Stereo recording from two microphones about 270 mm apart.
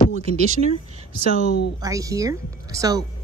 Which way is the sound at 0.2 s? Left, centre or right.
Right.